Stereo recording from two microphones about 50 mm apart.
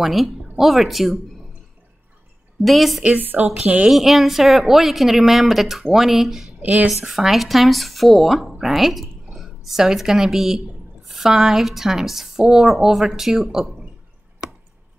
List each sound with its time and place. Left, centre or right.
0.0 s speech: centre
2.6 s speech: centre
3.0 s speech: right
3.9 s speech: centre
6.6 s a woman's voice: right
7.1 s a woman's voice: centre